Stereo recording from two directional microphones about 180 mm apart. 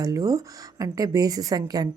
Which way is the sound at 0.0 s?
20° right (ahead or behind).